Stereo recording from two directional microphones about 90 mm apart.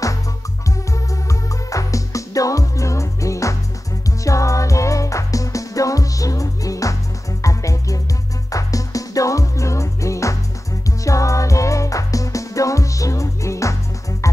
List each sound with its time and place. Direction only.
0.9 s music: 40° left (ahead or behind)